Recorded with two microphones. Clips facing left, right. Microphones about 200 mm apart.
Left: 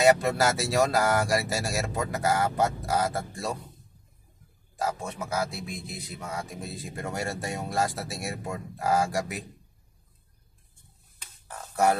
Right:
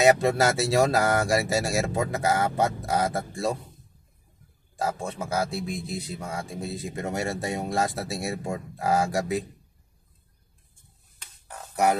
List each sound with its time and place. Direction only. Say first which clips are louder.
0.0 s speech: right 2 dB; 25° right (ahead or behind)
4.8 s speech: right 2 dB; 30° right (ahead or behind)
11.4 s music: right 1 dB; 15° right (ahead or behind)